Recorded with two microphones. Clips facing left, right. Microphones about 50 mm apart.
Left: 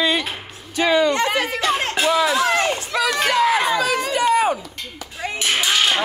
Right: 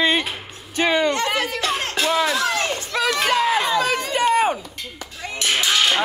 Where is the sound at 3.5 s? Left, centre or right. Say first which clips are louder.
Left 1 dB; left.